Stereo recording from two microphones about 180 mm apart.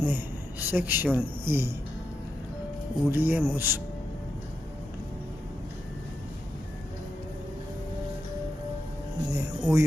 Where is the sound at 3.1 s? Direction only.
10° right (ahead or behind).